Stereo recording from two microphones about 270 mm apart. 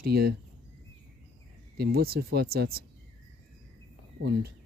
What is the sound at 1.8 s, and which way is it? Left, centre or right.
Speech, right.